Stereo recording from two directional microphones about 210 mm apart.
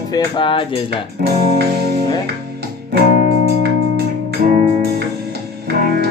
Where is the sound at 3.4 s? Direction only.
50° right (ahead or behind).